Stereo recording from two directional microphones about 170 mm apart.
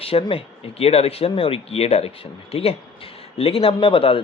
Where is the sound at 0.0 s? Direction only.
35° left (ahead or behind).